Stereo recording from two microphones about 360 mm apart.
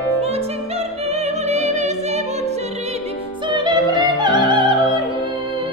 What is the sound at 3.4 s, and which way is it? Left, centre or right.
Opera, centre.